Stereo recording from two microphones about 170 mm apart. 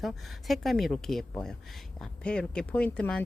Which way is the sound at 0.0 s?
Centre (ahead or behind).